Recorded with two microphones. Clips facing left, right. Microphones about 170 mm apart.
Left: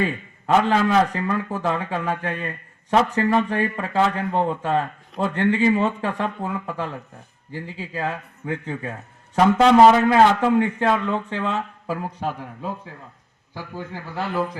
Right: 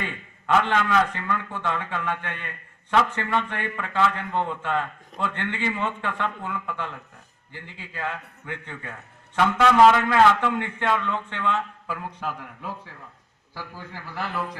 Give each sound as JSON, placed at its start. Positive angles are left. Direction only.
{"t": 0.0, "sound": "a man's voice", "side_deg": 35}